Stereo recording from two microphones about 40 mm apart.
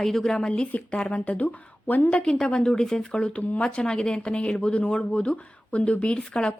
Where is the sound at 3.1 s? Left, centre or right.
Left.